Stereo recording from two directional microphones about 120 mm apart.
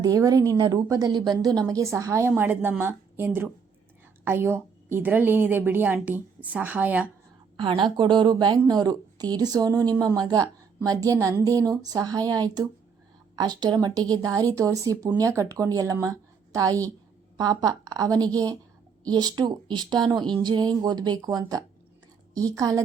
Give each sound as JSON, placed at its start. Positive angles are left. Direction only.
{"t": 0.0, "sound": "a woman's voice", "side_deg": -30}
{"t": 2.3, "sound": "a woman's voice", "side_deg": -15}
{"t": 7.5, "sound": "a woman's voice", "side_deg": -45}